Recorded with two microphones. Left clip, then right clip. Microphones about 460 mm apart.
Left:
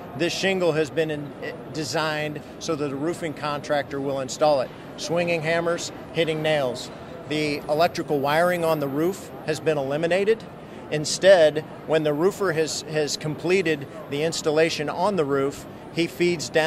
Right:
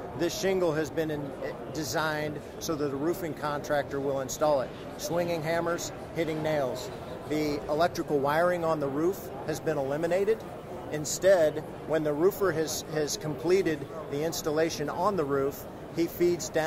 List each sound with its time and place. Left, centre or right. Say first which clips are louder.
0.2 s speech: left 5 dB; left